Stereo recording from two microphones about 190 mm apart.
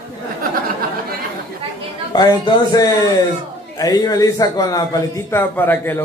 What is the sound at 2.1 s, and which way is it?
A man's voice, 20° left (ahead or behind).